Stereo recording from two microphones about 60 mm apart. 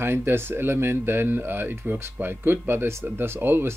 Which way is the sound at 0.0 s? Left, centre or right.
Right.